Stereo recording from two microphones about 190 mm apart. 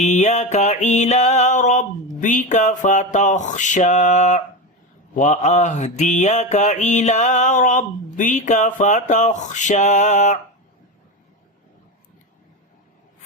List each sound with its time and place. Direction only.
0.0 s mantra: 40° left (ahead or behind)